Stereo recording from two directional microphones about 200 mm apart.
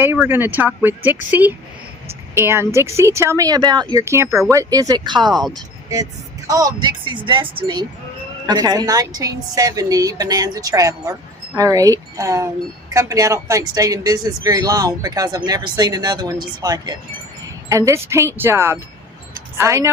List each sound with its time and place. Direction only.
0.0 s speech: 10° right (ahead or behind)
6.5 s speech: 20° right (ahead or behind)